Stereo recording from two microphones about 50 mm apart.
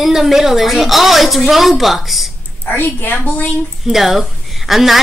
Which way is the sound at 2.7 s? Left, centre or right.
Left.